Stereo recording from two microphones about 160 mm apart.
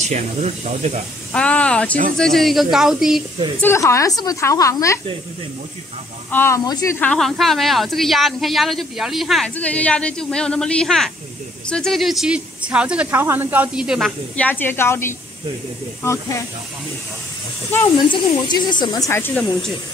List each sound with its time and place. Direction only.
0.0 s speech: 45° right (ahead or behind)
1.3 s a woman's voice: 5° left (ahead or behind)
3.6 s speech: 20° left (ahead or behind)
6.3 s speech: 15° left (ahead or behind)
7.0 s speech: 5° left (ahead or behind)
14.3 s a woman's voice: 10° left (ahead or behind)
17.8 s speech: 30° left (ahead or behind)